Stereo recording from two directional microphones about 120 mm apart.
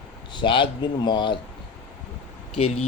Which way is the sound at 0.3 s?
40° left (ahead or behind).